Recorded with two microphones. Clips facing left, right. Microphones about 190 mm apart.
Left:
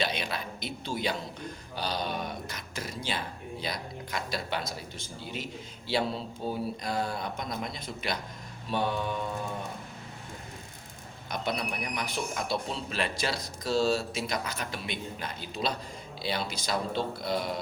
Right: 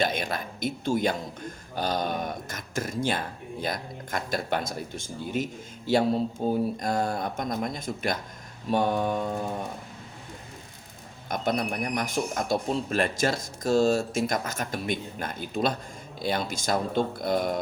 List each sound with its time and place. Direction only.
0.0 s speech: 45° right (ahead or behind)
11.3 s speech: 50° right (ahead or behind)